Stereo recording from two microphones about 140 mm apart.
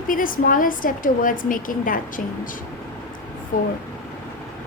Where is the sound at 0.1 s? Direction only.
80° left.